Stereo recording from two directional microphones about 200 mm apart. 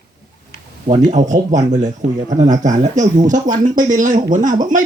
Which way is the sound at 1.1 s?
35° right (ahead or behind).